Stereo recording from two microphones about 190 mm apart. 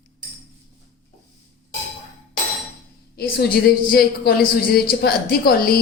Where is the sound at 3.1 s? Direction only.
55° left (ahead or behind).